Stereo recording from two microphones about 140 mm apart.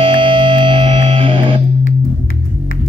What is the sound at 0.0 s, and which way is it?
Music, 40° right (ahead or behind).